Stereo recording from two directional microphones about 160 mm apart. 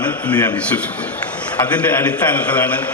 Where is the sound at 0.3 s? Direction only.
10° left (ahead or behind).